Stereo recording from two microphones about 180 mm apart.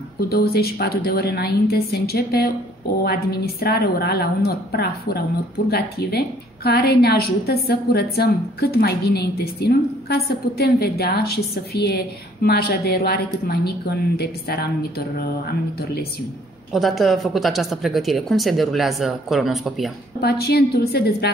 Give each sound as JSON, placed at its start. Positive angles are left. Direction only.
{"t": 0.3, "sound": "a woman's voice", "side_deg": 60}
{"t": 16.7, "sound": "speech", "side_deg": 0}
{"t": 20.2, "sound": "a woman's voice", "side_deg": 65}